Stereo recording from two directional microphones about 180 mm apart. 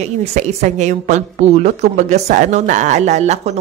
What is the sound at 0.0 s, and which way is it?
A woman's voice, 35° right (ahead or behind).